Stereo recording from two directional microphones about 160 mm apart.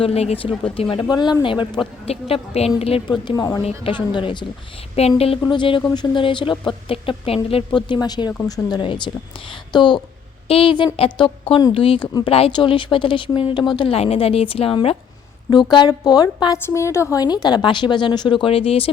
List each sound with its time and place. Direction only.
0.0 s a woman's voice: 40° left (ahead or behind)